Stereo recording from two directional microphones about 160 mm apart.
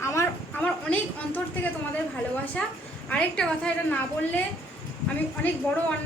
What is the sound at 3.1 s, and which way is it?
Speech, 5° left (ahead or behind).